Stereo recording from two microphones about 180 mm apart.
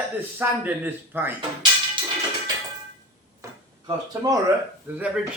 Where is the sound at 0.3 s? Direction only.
10° right (ahead or behind).